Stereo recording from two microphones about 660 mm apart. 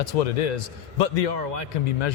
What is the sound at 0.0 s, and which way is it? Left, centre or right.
A man's voice, left.